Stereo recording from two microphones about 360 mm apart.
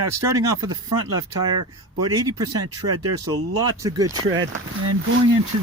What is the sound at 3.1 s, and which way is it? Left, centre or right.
Speech, right.